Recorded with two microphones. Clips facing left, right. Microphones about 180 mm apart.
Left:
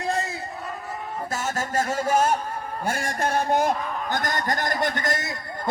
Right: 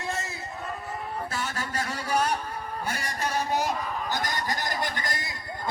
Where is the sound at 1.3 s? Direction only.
45° left (ahead or behind).